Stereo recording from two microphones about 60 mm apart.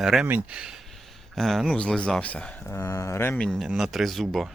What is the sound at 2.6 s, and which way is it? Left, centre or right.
Speech, left.